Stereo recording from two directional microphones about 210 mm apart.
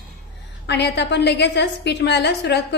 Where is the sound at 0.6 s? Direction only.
55° left (ahead or behind).